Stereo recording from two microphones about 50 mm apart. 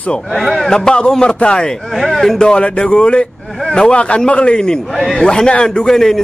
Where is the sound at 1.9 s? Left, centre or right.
Centre.